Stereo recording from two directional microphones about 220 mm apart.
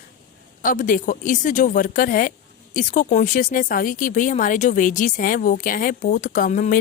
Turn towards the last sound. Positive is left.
turn(degrees=35)  # may be behind; listen again after turning